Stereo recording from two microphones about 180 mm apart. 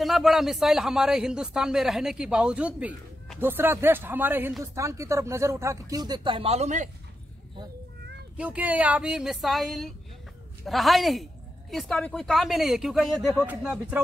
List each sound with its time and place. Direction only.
0.0 s a man's voice: centre (ahead or behind); by 6.9 s 40° right (ahead or behind)
8.4 s a man's voice: 10° right (ahead or behind)